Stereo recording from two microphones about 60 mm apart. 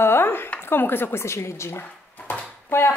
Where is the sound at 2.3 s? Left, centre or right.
Left.